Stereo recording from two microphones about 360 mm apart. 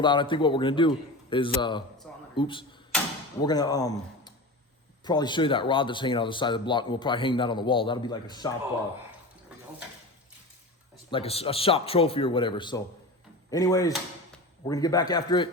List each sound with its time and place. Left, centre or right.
0.0 s speech: centre
11.1 s speech: centre